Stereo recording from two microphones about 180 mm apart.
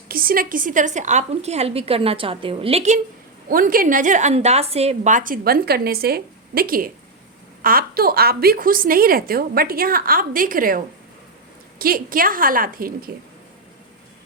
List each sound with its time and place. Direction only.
0.1 s a woman's voice: 55° right (ahead or behind); by 3.0 s 35° right (ahead or behind)
3.5 s a woman's voice: 50° right (ahead or behind)